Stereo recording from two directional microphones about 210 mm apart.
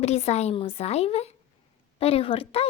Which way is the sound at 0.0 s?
30° left (ahead or behind).